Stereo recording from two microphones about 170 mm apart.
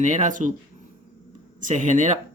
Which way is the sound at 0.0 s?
45° right (ahead or behind).